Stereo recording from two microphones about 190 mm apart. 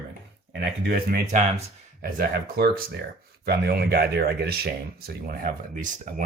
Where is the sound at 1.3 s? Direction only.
35° right (ahead or behind).